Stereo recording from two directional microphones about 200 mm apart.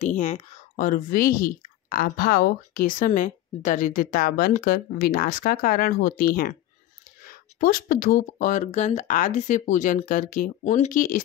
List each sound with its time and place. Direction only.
0.0 s speech: 40° left (ahead or behind)